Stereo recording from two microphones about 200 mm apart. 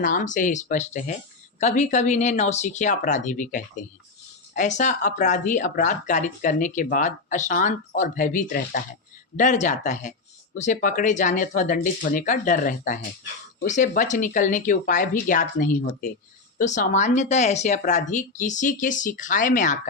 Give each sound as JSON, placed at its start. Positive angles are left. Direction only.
{"t": 0.0, "sound": "speech", "side_deg": 40}